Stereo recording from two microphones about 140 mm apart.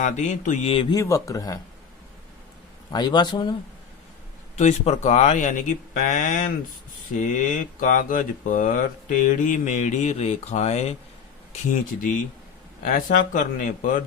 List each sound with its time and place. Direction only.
0.0 s speech: 60° left (ahead or behind)
0.7 s speech: 40° left (ahead or behind)
0.9 s speech: 25° left (ahead or behind)
2.9 s speech: 30° left (ahead or behind)
4.5 s speech: 55° left (ahead or behind)
11.9 s speech: 70° left (ahead or behind)